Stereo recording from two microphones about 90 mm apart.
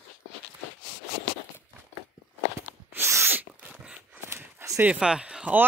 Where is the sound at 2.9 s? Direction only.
30° right (ahead or behind).